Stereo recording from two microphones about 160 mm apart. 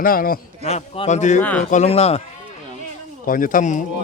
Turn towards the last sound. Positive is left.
turn(degrees=55)  # may be behind; listen again after turning